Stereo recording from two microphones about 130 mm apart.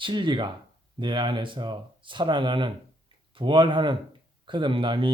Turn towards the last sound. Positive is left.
turn(degrees=-40)  # may be behind; listen again after turning